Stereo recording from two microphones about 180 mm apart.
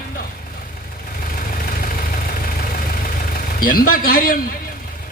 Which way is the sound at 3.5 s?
50° left (ahead or behind).